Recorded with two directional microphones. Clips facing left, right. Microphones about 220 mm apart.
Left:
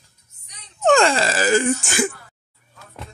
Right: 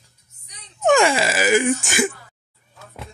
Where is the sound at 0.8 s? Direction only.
10° right (ahead or behind).